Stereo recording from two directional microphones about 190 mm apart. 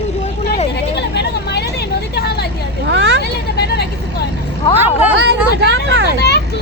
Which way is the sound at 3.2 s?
60° left (ahead or behind).